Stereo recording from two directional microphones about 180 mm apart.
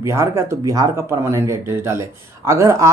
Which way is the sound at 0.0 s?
15° right (ahead or behind).